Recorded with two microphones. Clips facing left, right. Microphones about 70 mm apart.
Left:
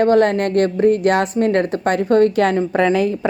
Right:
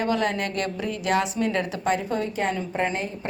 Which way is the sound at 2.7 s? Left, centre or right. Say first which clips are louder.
Left 11 dB; left.